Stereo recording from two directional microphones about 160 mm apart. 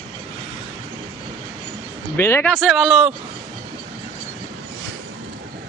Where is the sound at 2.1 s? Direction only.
15° left (ahead or behind).